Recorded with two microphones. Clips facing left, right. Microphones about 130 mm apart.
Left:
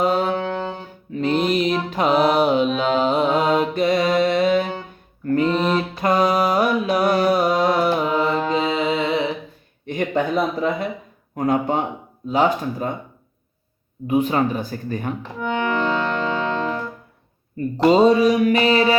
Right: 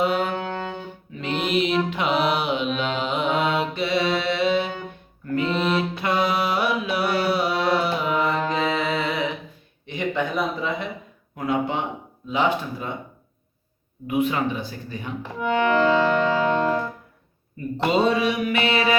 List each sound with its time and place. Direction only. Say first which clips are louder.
0.0 s music: left 3 dB; 35° left (ahead or behind)
5.2 s mantra: left 4 dB; 40° left (ahead or behind)
8.1 s mantra: left 3 dB; 30° left (ahead or behind)
9.8 s a sound: left 4 dB; 50° left (ahead or behind)
11.3 s speech: left 4 dB; 45° left (ahead or behind)
12.3 s mantra: left 4 dB; 40° left (ahead or behind)
14.1 s speech: left 4 dB; 35° left (ahead or behind)
16.0 s music: right 3 dB; 10° right (ahead or behind)
17.8 s mantra: left 7 dB; 35° left (ahead or behind)